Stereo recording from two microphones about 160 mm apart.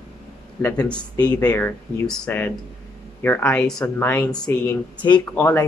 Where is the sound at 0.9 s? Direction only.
25° left (ahead or behind).